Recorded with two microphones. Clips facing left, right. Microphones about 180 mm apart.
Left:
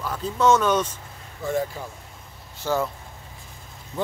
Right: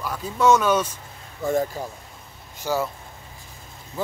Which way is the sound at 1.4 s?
40° right (ahead or behind).